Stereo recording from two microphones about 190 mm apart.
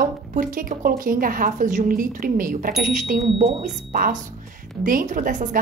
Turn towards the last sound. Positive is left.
turn(degrees=-45)  # may be behind; listen again after turning